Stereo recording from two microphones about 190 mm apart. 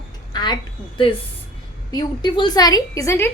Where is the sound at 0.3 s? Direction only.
20° left (ahead or behind).